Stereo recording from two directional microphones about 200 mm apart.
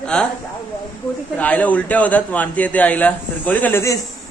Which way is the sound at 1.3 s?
5° left (ahead or behind).